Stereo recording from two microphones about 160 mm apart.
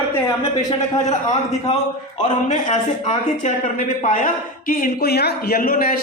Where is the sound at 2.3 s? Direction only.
50° left (ahead or behind).